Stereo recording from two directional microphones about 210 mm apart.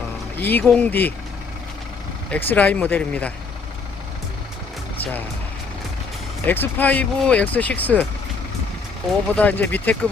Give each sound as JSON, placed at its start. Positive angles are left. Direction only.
{"t": 0.3, "sound": "speech", "side_deg": 10}
{"t": 2.3, "sound": "speech", "side_deg": 5}
{"t": 6.4, "sound": "speech", "side_deg": 10}
{"t": 9.4, "sound": "speech", "side_deg": 10}